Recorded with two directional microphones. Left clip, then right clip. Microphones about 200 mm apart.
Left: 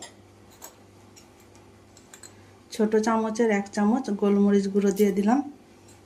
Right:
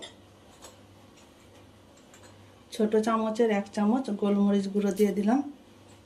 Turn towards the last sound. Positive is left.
turn(degrees=45)  # may be behind; listen again after turning